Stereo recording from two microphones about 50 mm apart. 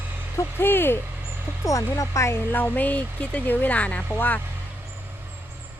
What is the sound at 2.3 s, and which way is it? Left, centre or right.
Speech, left.